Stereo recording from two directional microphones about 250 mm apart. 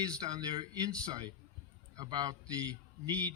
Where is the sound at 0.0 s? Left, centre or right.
Centre.